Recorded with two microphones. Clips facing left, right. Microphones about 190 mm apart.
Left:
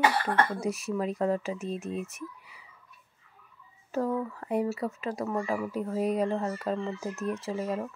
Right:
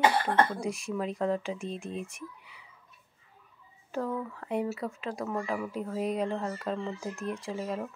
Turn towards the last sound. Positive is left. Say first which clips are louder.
# left 3 dB
turn(degrees=5)  # may be behind; listen again after turning